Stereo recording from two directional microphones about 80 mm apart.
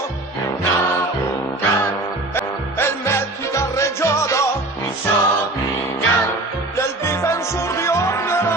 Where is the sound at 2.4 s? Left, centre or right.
Left.